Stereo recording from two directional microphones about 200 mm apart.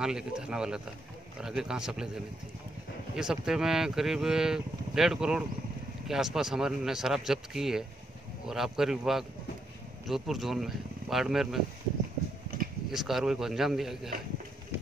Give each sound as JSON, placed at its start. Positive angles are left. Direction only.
{"t": 0.0, "sound": "speech", "side_deg": -5}
{"t": 3.2, "sound": "speech", "side_deg": -5}
{"t": 12.9, "sound": "speech", "side_deg": 0}